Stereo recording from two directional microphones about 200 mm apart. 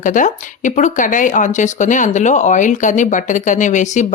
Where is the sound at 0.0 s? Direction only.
40° left (ahead or behind).